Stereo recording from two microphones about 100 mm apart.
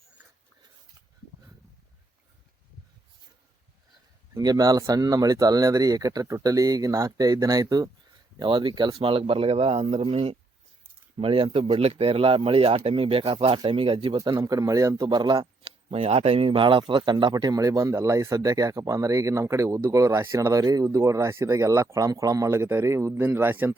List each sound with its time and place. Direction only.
4.4 s speech: 40° right (ahead or behind)
8.4 s speech: 55° right (ahead or behind); by 10.3 s 70° right (ahead or behind)
11.2 s speech: 60° right (ahead or behind)
11.8 s speech: 85° right; by 14.2 s 65° right (ahead or behind)
14.2 s speech: 35° right (ahead or behind)
15.9 s speech: 80° right; by 23.7 s 20° right (ahead or behind)